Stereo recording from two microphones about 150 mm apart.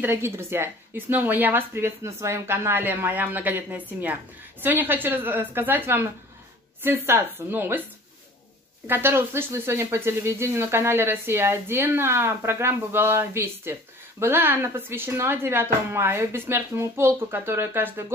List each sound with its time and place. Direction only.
0.0 s speech: 15° right (ahead or behind)
8.8 s speech: 15° right (ahead or behind)